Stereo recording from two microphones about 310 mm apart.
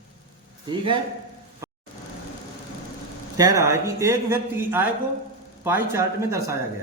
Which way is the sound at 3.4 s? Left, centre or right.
Centre.